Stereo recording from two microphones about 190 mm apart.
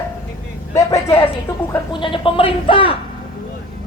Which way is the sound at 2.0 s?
25° left (ahead or behind).